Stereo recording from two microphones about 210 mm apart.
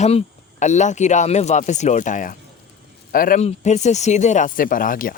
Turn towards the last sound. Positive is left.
turn(degrees=40)  # may be behind; listen again after turning